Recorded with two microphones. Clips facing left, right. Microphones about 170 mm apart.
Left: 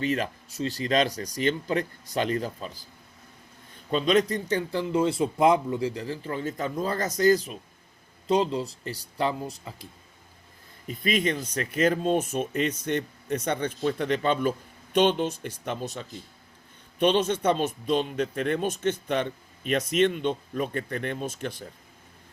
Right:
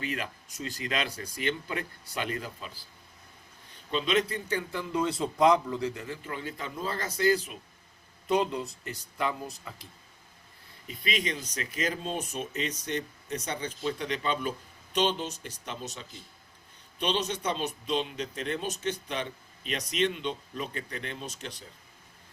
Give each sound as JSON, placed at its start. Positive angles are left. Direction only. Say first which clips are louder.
{"t": 0.0, "sound": "speech", "louder": "left 8 dB", "side_deg": 35}
{"t": 3.9, "sound": "speech", "louder": "left 5 dB", "side_deg": 45}
{"t": 8.3, "sound": "speech", "louder": "left 3 dB", "side_deg": 25}
{"t": 10.8, "sound": "speech", "louder": "left 7 dB", "side_deg": 50}